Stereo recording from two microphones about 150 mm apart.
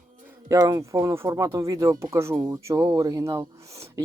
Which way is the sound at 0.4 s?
25° right (ahead or behind).